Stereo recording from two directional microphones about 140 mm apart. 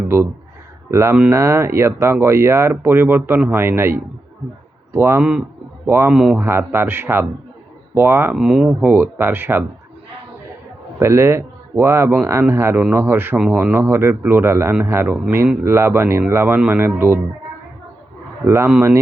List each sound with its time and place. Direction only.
0.9 s speech: 20° right (ahead or behind)
1.1 s a man's voice: 10° right (ahead or behind)
1.4 s a man's voice: 20° right (ahead or behind)
11.0 s a man's voice: 20° right (ahead or behind)
18.4 s a man's voice: 20° right (ahead or behind)